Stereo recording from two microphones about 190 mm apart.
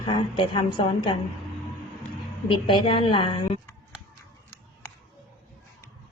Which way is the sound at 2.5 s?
25° left (ahead or behind).